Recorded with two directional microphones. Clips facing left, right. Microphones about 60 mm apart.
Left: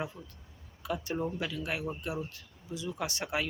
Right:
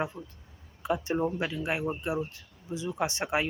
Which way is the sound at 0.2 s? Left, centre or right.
Right.